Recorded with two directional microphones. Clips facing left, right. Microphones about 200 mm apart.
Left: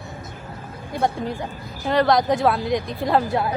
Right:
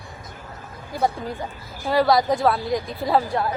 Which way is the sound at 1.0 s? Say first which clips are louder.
Left 1 dB; centre (ahead or behind).